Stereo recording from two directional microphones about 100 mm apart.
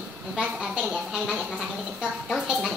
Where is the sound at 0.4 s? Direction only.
10° right (ahead or behind).